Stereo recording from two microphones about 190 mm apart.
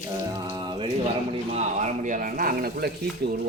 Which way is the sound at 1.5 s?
40° right (ahead or behind).